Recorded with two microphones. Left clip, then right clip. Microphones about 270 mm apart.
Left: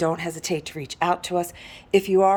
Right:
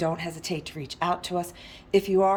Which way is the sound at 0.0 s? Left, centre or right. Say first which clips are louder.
Left 4 dB; centre.